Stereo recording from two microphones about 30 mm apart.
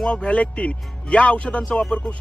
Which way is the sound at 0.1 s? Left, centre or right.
Left.